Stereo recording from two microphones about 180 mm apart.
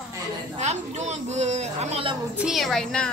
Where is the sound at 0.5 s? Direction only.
40° right (ahead or behind).